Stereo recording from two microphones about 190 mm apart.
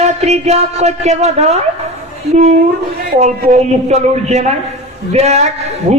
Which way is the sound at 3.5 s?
35° right (ahead or behind).